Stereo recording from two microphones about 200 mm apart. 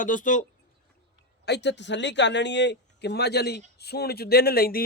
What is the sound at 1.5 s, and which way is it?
A man's voice, 60° left (ahead or behind).